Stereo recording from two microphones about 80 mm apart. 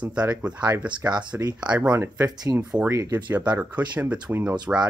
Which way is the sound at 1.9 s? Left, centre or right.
Right.